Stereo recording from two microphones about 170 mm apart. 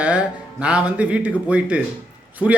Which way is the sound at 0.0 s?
5° right (ahead or behind).